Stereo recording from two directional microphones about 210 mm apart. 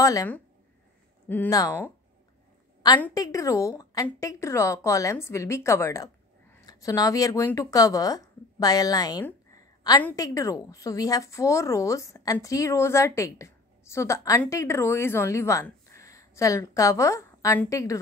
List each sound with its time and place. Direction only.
0.0 s a woman's voice: 15° left (ahead or behind)
3.0 s a woman's voice: 15° left (ahead or behind)